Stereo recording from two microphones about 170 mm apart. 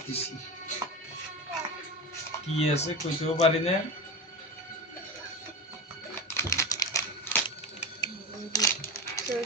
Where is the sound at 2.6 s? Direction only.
40° left (ahead or behind).